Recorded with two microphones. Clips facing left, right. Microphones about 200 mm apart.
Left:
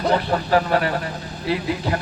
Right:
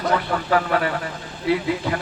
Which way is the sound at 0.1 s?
35° left (ahead or behind).